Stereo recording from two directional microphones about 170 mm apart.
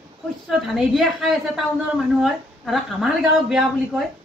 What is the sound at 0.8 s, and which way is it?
A woman's voice, centre (ahead or behind).